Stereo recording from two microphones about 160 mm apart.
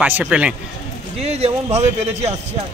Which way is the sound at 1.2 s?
40° right (ahead or behind).